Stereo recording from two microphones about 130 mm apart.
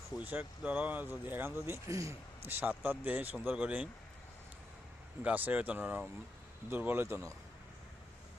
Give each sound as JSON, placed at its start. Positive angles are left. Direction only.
{"t": 0.3, "sound": "speech", "side_deg": -10}
{"t": 5.2, "sound": "speech", "side_deg": -15}